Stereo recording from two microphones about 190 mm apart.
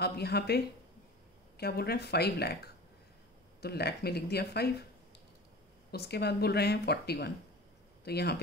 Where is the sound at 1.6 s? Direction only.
55° left (ahead or behind).